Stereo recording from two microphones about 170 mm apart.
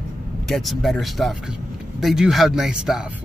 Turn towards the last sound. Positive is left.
turn(degrees=-5)  # may be behind; listen again after turning